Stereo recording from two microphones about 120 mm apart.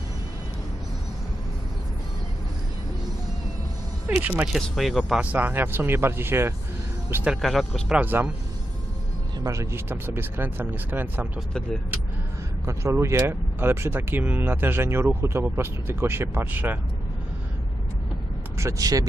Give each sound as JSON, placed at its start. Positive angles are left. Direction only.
{"t": 4.2, "sound": "speech", "side_deg": -10}
{"t": 7.4, "sound": "speech", "side_deg": 0}
{"t": 9.4, "sound": "speech", "side_deg": -25}
{"t": 11.3, "sound": "speech", "side_deg": 5}
{"t": 12.6, "sound": "speech", "side_deg": -25}
{"t": 18.5, "sound": "speech", "side_deg": -25}